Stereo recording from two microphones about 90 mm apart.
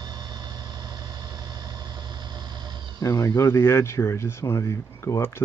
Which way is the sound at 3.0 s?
35° left (ahead or behind).